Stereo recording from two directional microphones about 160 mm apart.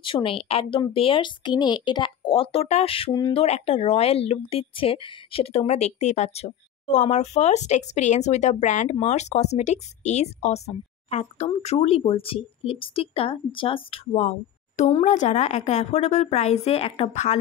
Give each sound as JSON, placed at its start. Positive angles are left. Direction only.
{"t": 0.0, "sound": "speech", "side_deg": 35}
{"t": 3.1, "sound": "speech", "side_deg": 25}
{"t": 3.3, "sound": "speech", "side_deg": 40}
{"t": 14.8, "sound": "speech", "side_deg": 45}